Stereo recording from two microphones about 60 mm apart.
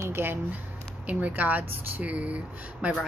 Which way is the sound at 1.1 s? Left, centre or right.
Right.